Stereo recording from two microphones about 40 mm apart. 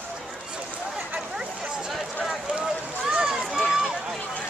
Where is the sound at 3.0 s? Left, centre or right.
Centre.